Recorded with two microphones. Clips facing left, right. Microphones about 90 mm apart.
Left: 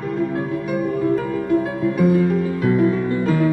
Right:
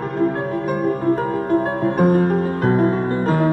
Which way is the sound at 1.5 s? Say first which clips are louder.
Even; 50° right (ahead or behind).